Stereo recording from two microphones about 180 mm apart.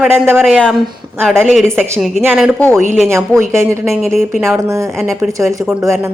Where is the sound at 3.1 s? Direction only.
15° right (ahead or behind).